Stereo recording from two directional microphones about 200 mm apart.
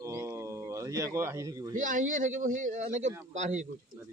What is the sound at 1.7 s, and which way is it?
Speech, 40° right (ahead or behind).